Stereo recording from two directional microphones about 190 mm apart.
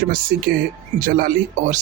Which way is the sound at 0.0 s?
50° right (ahead or behind).